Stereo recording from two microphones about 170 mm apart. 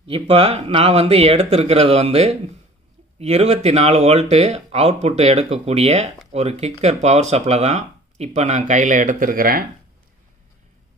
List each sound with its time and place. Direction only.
0.0 s speech: 35° right (ahead or behind); by 9.7 s 60° right (ahead or behind)